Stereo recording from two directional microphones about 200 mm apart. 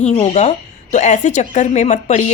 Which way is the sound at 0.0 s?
35° left (ahead or behind).